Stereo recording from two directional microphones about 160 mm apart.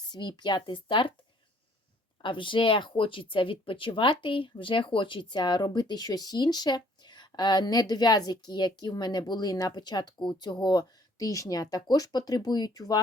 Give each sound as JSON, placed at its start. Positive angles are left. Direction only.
{"t": 0.1, "sound": "speech", "side_deg": 30}
{"t": 2.2, "sound": "speech", "side_deg": 30}